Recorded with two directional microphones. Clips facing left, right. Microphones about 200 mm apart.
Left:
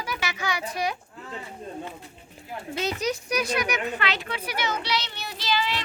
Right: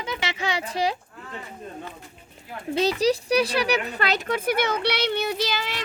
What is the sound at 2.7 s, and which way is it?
Speech, 35° right (ahead or behind).